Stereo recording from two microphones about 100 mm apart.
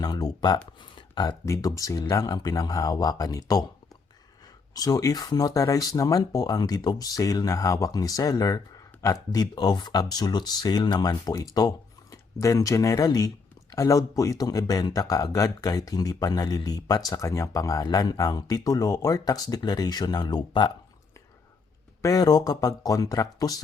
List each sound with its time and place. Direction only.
0.0 s speech: 40° left (ahead or behind)
1.5 s speech: 35° left (ahead or behind)
4.7 s speech: 40° left (ahead or behind)
22.0 s speech: 40° left (ahead or behind)